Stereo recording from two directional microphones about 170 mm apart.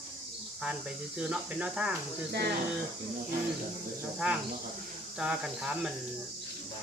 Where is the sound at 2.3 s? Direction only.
75° right (ahead or behind).